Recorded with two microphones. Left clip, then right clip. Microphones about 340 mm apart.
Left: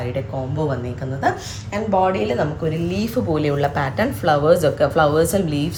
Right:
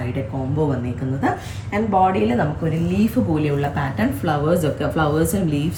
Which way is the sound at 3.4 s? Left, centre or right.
Centre.